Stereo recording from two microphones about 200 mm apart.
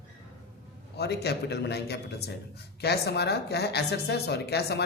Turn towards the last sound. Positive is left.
turn(degrees=55)  # may be behind; listen again after turning